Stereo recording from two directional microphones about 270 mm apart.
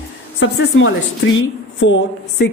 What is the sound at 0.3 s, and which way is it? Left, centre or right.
A woman's voice, left.